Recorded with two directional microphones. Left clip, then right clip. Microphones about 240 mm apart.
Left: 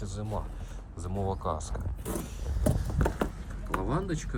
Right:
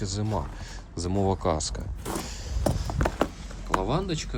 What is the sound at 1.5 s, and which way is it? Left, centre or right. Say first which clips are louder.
Speech: right 8 dB; right.